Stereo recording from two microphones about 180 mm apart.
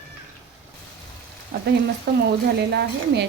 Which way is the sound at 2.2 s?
65° right (ahead or behind).